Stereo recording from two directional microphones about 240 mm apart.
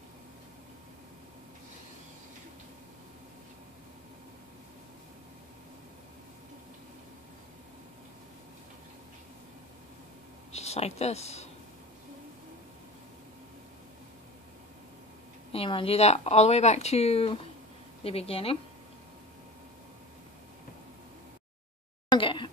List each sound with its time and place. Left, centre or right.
10.5 s speech: left
15.5 s speech: left
22.1 s a sound: left